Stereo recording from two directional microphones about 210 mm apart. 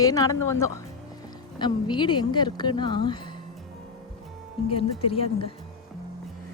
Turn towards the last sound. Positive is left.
turn(degrees=25)  # may be behind; listen again after turning